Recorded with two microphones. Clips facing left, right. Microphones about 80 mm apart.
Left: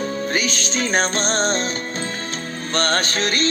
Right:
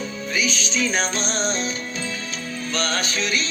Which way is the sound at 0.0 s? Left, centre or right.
Left.